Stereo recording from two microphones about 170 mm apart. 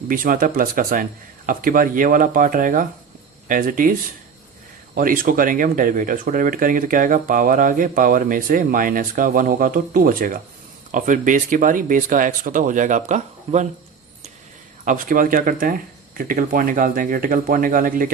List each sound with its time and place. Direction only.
0.1 s speech: 55° right (ahead or behind)
4.9 s speech: 55° right (ahead or behind)
14.8 s speech: 55° right (ahead or behind)